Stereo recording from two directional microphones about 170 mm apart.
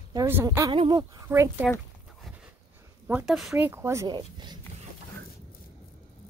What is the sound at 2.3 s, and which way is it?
Dog, centre (ahead or behind).